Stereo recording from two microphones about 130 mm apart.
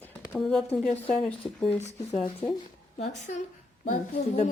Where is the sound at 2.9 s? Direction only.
60° left (ahead or behind).